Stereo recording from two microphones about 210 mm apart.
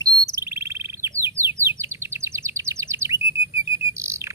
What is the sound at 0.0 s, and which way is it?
Bird, 15° right (ahead or behind).